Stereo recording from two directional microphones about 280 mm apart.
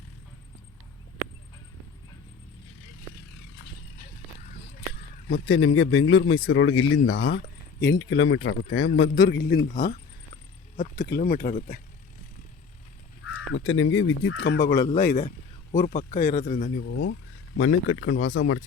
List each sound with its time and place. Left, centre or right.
5.3 s speech: left
13.3 s speech: left